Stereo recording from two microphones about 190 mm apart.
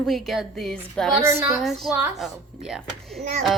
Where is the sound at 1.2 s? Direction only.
15° right (ahead or behind).